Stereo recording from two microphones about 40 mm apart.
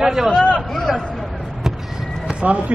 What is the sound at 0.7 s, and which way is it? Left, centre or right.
Speech, centre.